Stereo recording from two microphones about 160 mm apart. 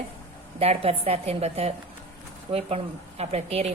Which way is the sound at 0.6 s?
40° right (ahead or behind).